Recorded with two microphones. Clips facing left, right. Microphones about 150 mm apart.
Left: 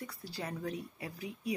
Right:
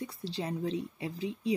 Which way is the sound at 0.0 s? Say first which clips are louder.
Right 5 dB; 25° right (ahead or behind).